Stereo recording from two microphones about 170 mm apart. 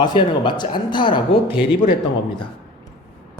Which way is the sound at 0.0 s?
25° left (ahead or behind).